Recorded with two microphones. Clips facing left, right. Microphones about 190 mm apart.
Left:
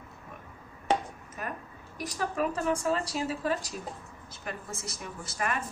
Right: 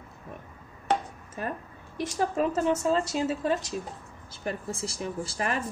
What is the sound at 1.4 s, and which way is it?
A woman's voice, 30° right (ahead or behind).